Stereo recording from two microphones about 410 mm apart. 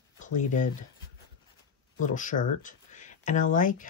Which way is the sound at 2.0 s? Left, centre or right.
Centre.